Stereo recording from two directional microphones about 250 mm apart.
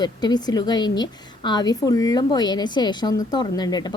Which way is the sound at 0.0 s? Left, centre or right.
Centre.